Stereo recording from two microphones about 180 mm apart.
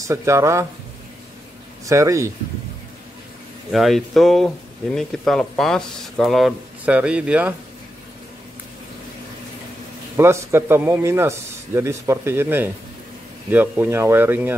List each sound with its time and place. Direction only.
0.0 s a man's voice: 15° right (ahead or behind)
1.9 s a man's voice: 15° right (ahead or behind)
3.7 s speech: centre (ahead or behind)
10.1 s a man's voice: 15° right (ahead or behind)